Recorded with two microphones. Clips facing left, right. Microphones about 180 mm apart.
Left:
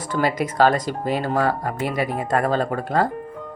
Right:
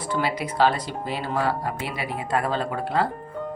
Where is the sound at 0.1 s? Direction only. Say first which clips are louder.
Left 4 dB; 45° left (ahead or behind).